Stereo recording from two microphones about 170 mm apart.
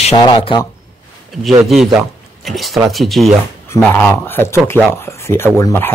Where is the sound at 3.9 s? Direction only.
15° left (ahead or behind).